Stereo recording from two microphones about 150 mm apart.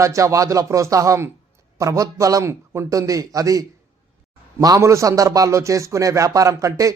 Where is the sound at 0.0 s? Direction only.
20° right (ahead or behind).